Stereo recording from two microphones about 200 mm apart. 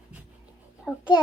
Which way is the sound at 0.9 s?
Centre (ahead or behind).